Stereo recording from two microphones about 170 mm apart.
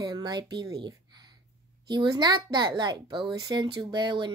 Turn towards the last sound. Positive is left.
turn(degrees=-25)  # may be behind; listen again after turning